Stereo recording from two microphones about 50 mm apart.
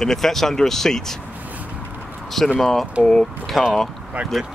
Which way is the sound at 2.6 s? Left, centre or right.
Centre.